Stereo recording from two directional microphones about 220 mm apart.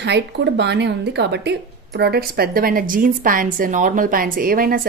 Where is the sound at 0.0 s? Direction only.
50° right (ahead or behind).